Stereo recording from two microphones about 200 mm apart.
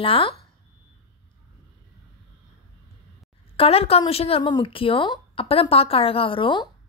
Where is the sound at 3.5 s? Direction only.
30° left (ahead or behind).